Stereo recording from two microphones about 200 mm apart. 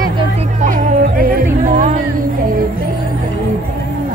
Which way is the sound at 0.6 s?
45° right (ahead or behind).